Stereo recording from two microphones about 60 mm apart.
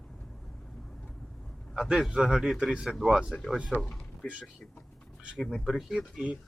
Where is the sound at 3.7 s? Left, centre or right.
Centre.